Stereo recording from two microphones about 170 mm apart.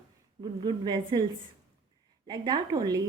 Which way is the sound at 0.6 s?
25° right (ahead or behind).